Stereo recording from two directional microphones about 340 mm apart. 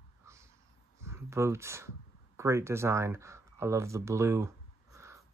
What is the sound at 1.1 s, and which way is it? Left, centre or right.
Speech, centre.